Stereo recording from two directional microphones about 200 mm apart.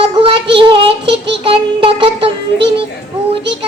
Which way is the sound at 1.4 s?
25° right (ahead or behind).